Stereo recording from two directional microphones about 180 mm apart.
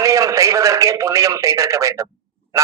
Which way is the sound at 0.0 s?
15° right (ahead or behind).